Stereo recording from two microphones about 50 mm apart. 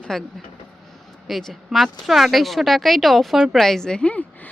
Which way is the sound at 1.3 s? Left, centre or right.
Centre.